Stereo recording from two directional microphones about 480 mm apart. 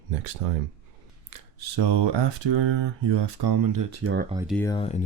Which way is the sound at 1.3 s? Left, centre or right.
Right.